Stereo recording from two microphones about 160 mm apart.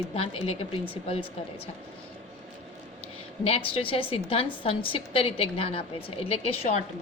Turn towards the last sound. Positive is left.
turn(degrees=40)  # may be behind; listen again after turning